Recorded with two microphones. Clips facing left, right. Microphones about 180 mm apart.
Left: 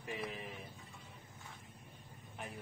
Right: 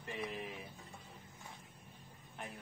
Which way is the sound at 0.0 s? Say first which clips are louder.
Right 1 dB; centre (ahead or behind).